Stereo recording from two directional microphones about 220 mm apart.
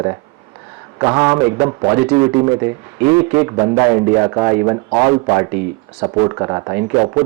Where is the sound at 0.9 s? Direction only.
15° right (ahead or behind).